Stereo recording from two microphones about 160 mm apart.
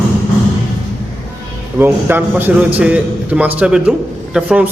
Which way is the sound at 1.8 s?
15° right (ahead or behind).